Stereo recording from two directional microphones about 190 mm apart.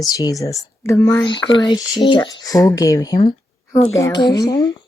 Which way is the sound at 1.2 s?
25° left (ahead or behind).